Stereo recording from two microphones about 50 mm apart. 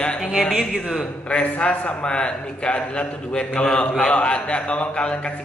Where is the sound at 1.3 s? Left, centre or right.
Left.